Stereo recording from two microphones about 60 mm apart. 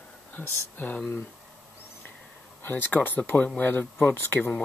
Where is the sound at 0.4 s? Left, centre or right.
Left.